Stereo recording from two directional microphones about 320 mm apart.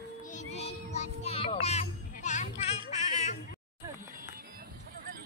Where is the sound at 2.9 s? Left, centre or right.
Left.